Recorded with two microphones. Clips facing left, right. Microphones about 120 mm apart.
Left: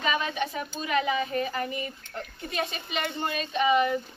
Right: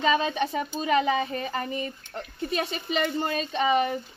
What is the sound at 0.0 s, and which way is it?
Speech, 35° right (ahead or behind).